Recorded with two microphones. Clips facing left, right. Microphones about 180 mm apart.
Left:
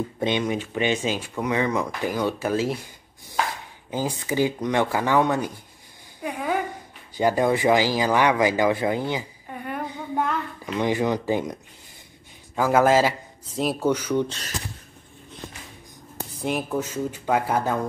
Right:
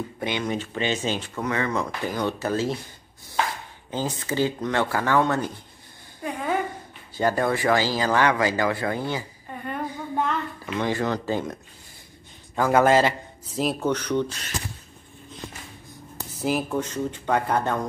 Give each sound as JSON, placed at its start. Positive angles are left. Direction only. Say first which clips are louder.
{"t": 0.2, "sound": "speech", "louder": "left 3 dB", "side_deg": 20}
{"t": 3.9, "sound": "speech", "louder": "left 2 dB", "side_deg": 10}
{"t": 6.2, "sound": "a sound", "louder": "even", "side_deg": 5}
{"t": 7.2, "sound": "speech", "louder": "left 2 dB", "side_deg": 15}
{"t": 9.5, "sound": "a sound", "louder": "even", "side_deg": 5}
{"t": 10.8, "sound": "speech", "louder": "left 3 dB", "side_deg": 15}
{"t": 12.5, "sound": "speech", "louder": "even", "side_deg": 5}
{"t": 16.3, "sound": "speech", "louder": "right 1 dB", "side_deg": 0}